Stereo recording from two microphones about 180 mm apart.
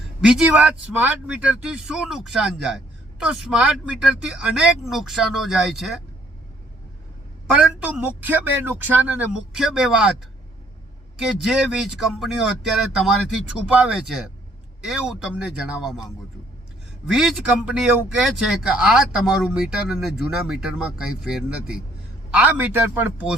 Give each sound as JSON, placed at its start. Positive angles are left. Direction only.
{"t": 0.2, "sound": "speech", "side_deg": 0}
{"t": 7.5, "sound": "speech", "side_deg": -5}
{"t": 11.2, "sound": "speech", "side_deg": -5}